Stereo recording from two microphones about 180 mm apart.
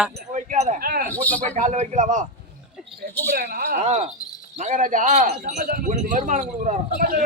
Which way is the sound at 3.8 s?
40° right (ahead or behind).